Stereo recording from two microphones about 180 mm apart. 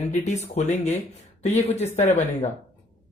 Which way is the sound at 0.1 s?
40° left (ahead or behind).